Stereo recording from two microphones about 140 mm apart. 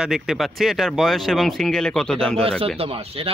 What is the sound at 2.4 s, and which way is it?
Speech, 45° right (ahead or behind).